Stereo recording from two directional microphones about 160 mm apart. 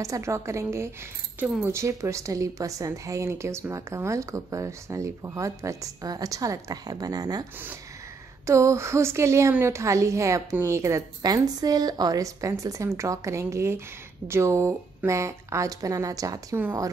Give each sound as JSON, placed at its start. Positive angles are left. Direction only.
{"t": 0.0, "sound": "a woman's voice", "side_deg": -20}
{"t": 8.5, "sound": "a woman's voice", "side_deg": -20}